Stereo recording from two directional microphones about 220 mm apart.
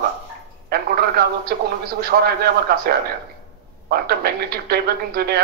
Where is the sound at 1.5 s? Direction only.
45° right (ahead or behind).